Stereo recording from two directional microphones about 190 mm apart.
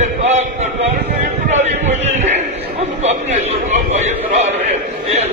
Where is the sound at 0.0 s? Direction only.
35° right (ahead or behind).